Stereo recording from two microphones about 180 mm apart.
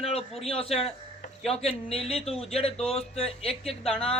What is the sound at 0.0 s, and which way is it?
A man's voice, 35° left (ahead or behind).